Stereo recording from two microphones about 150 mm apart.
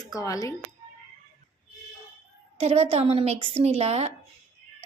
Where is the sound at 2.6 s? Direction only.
45° right (ahead or behind).